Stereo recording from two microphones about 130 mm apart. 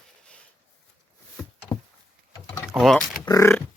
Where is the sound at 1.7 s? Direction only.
30° left (ahead or behind).